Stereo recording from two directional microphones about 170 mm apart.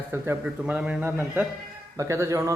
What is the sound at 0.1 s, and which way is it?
Speech, 10° right (ahead or behind).